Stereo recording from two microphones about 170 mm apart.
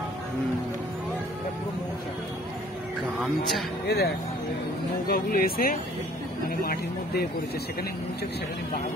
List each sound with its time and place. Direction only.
3.8 s speech: 65° left (ahead or behind)